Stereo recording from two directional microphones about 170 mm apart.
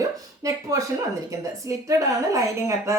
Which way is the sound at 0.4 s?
20° right (ahead or behind).